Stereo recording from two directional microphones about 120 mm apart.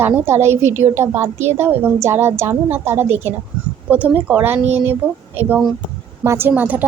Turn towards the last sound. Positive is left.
turn(degrees=-15)  # may be behind; listen again after turning